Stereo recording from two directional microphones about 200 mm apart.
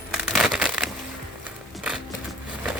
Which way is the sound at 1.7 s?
5° right (ahead or behind).